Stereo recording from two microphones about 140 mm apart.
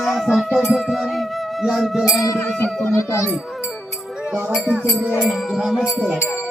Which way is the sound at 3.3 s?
5° right (ahead or behind).